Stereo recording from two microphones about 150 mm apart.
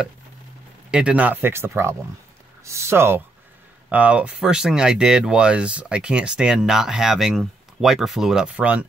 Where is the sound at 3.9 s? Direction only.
10° right (ahead or behind).